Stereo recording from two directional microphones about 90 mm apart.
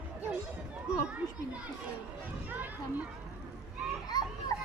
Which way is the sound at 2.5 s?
20° right (ahead or behind).